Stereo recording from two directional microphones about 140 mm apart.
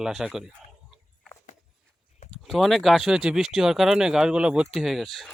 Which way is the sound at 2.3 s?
Centre (ahead or behind).